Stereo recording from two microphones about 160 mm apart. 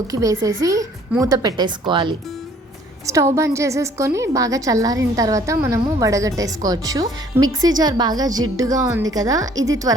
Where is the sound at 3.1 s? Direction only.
20° right (ahead or behind).